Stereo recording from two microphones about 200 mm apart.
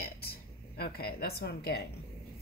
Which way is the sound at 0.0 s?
50° left (ahead or behind).